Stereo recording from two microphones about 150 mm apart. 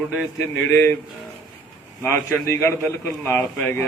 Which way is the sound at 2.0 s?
15° left (ahead or behind).